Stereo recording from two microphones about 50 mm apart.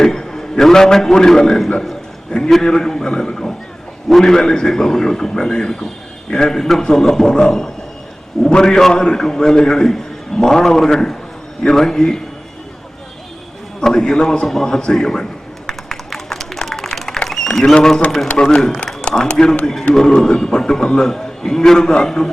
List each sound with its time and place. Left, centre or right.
0.0 s a man's voice: centre
13.8 s a sound: centre
18.4 s a man's voice: centre